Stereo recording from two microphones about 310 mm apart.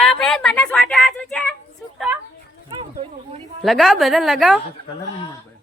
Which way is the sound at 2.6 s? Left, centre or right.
Centre.